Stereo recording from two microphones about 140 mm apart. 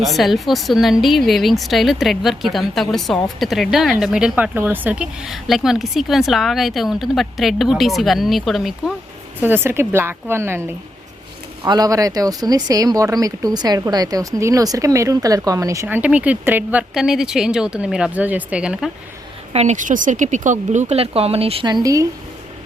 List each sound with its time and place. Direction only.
0.0 s a woman's voice: centre (ahead or behind)
9.4 s speech: 15° right (ahead or behind)
11.6 s speech: 30° right (ahead or behind)
16.0 s speech: 10° right (ahead or behind)
19.5 s speech: 60° right (ahead or behind); by 21.7 s 45° right (ahead or behind)